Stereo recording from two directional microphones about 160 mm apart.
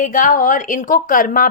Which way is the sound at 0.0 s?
55° left (ahead or behind).